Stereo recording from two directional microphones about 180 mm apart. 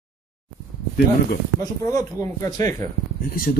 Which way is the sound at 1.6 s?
20° left (ahead or behind).